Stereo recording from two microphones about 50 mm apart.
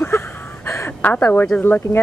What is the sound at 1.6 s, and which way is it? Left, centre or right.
Speech, left.